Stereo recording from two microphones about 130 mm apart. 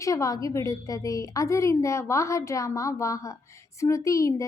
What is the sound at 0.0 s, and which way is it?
A woman's voice, 25° left (ahead or behind).